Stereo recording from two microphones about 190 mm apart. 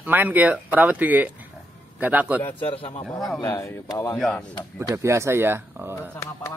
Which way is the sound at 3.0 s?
Centre (ahead or behind).